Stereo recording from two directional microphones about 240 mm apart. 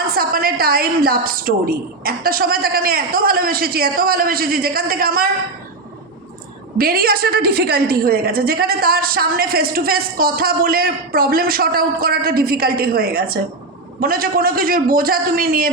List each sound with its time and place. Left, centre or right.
0.1 s a woman's voice: right
6.7 s a woman's voice: right